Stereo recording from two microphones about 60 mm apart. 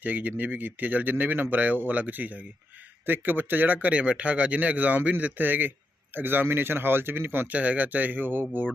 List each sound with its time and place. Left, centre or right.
0.0 s speech: right